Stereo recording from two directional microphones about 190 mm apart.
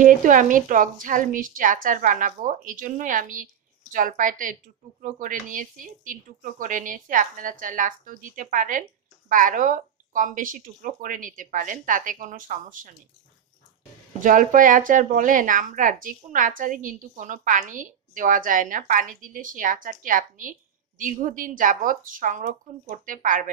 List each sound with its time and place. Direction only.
0.0 s speech: 45° right (ahead or behind)
14.2 s speech: 45° right (ahead or behind)